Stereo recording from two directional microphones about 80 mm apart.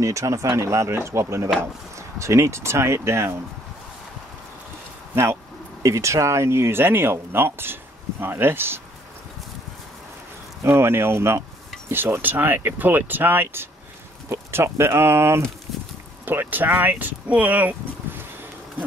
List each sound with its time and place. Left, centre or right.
0.0 s speech: right
5.1 s speech: right
10.6 s speech: right